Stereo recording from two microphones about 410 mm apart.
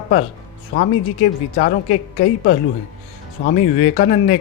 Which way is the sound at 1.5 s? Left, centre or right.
Left.